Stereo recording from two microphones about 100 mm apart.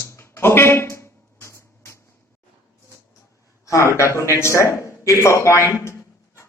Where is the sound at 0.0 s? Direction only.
25° left (ahead or behind).